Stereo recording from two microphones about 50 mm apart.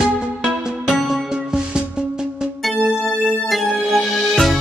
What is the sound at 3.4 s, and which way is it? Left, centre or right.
Music, centre.